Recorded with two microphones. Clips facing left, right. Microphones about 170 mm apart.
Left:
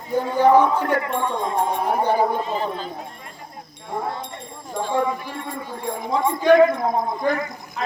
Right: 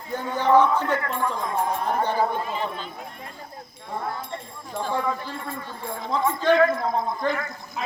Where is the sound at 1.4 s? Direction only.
25° left (ahead or behind).